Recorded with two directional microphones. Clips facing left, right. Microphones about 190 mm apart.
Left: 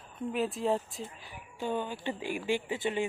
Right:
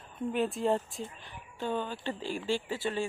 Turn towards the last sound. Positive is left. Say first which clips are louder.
# left 1 dB
turn(degrees=20)  # may be behind; listen again after turning